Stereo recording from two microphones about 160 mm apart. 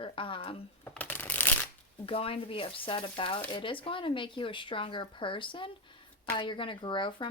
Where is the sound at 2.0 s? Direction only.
35° left (ahead or behind).